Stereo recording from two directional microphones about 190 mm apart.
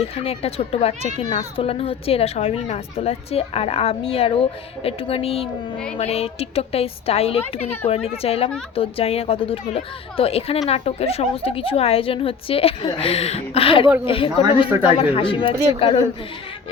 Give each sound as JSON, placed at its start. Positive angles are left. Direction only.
{"t": 0.3, "sound": "a woman's voice", "side_deg": 30}
{"t": 13.8, "sound": "speech", "side_deg": -10}
{"t": 14.1, "sound": "speech", "side_deg": 30}